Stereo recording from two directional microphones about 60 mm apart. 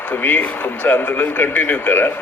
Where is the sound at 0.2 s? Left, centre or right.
Left.